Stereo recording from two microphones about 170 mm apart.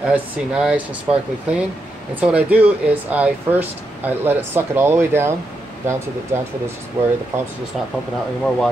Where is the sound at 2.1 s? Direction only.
10° right (ahead or behind).